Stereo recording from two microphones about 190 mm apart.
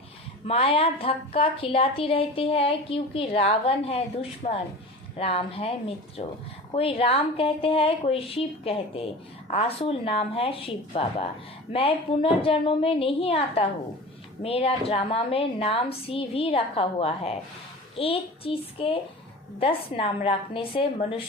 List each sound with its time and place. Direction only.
0.4 s a woman's voice: 30° left (ahead or behind)